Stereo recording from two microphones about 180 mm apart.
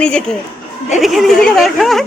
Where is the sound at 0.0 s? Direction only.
5° left (ahead or behind).